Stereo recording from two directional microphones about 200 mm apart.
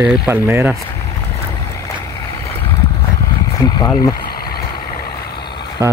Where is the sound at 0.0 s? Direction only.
5° right (ahead or behind).